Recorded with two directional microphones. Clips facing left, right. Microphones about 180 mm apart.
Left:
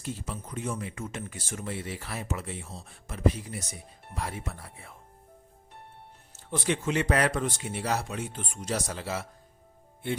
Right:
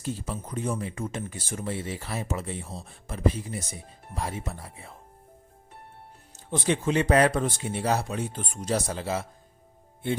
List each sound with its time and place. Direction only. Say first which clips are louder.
0.0 s speech: right 4 dB; 35° right (ahead or behind)
6.7 s speech: right 4 dB; 30° right (ahead or behind)